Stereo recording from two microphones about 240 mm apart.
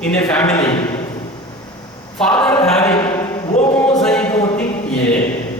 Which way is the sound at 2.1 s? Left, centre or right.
Centre.